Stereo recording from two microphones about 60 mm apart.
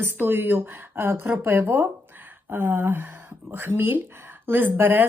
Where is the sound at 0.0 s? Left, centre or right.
Right.